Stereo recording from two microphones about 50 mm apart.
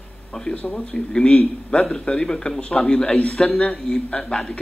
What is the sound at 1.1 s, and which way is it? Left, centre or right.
A man's voice, centre.